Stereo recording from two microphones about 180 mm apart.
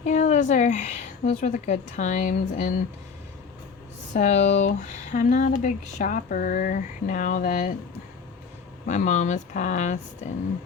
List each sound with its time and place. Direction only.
0.0 s speech: 40° left (ahead or behind)
4.1 s speech: 40° left (ahead or behind)
8.9 s speech: 40° left (ahead or behind)